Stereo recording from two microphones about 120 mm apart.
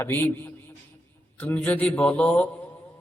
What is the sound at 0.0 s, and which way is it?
A man's voice, 15° left (ahead or behind).